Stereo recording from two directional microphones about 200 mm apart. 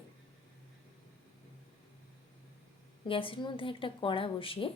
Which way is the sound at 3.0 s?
25° left (ahead or behind).